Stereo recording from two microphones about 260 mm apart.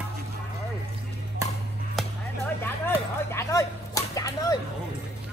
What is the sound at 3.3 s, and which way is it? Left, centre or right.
Speech, centre.